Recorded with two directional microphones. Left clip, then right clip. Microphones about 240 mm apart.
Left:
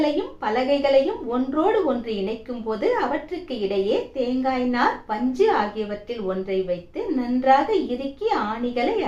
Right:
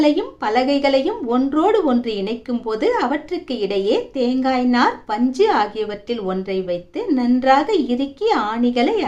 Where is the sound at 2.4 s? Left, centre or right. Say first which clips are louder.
Right 5 dB; right.